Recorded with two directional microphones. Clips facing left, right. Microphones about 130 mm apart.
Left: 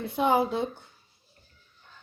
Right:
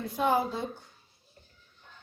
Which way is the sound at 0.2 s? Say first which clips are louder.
Left 3 dB; 75° left (ahead or behind).